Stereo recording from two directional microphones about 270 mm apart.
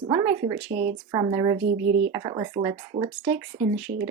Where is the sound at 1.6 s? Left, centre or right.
Right.